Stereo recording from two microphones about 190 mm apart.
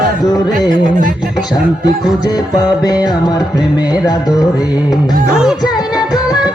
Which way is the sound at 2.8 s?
20° left (ahead or behind).